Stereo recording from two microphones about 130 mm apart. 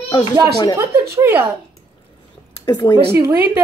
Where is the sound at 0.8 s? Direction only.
20° right (ahead or behind).